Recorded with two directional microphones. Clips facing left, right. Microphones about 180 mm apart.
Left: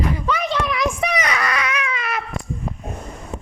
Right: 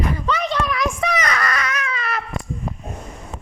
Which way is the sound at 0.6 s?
20° left (ahead or behind).